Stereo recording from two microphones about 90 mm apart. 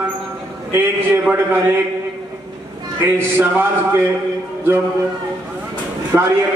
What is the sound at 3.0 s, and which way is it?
A man's voice, 25° right (ahead or behind).